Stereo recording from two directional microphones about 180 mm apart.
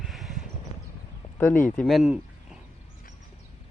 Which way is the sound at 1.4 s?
10° left (ahead or behind).